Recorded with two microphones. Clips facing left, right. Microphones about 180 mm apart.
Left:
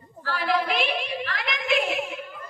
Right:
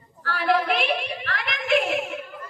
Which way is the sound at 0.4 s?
55° right (ahead or behind).